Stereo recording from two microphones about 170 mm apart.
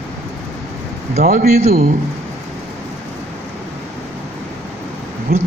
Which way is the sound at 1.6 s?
40° right (ahead or behind).